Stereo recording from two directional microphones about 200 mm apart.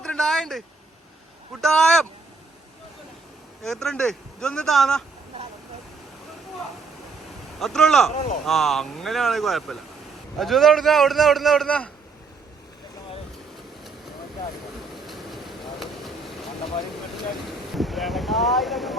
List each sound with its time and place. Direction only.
0.0 s a sound: 5° left (ahead or behind)
1.6 s a man's voice: 5° left (ahead or behind)
3.6 s a man's voice: 5° left (ahead or behind)
7.6 s a man's voice: centre (ahead or behind)
8.1 s speech: 35° left (ahead or behind)
8.4 s a man's voice: centre (ahead or behind)
14.9 s vehicle: centre (ahead or behind)
17.7 s wind noise: centre (ahead or behind)